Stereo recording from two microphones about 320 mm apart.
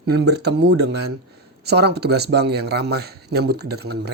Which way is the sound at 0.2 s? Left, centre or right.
Right.